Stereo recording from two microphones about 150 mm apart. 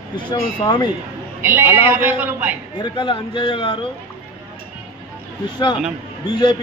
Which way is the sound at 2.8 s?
30° left (ahead or behind).